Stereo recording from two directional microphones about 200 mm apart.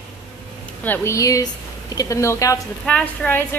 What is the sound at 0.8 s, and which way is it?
Speech, 10° left (ahead or behind).